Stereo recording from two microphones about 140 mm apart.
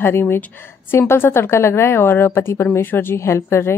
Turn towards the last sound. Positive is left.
turn(degrees=20)  # may be behind; listen again after turning